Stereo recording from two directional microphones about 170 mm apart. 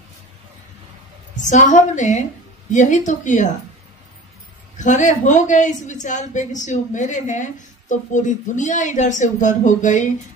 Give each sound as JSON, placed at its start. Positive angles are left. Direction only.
{"t": 1.4, "sound": "a woman's voice", "side_deg": 45}
{"t": 4.7, "sound": "a woman's voice", "side_deg": 45}